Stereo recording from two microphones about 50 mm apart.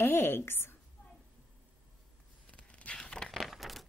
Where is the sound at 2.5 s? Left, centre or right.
Left.